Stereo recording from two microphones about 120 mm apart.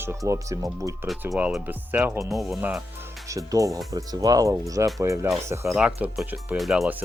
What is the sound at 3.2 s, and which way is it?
Speech, 25° right (ahead or behind).